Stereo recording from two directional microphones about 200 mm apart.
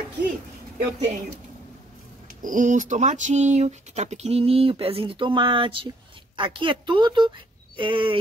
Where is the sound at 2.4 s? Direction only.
40° right (ahead or behind).